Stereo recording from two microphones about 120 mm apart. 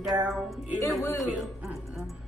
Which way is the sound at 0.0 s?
5° right (ahead or behind).